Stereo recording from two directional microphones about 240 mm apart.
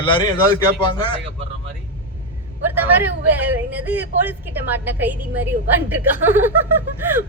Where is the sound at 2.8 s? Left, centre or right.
Centre.